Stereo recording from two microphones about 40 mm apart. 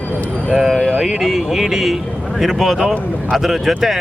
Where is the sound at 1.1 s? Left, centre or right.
Centre.